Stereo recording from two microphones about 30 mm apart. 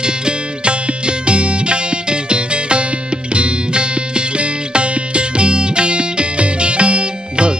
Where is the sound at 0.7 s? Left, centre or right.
Right.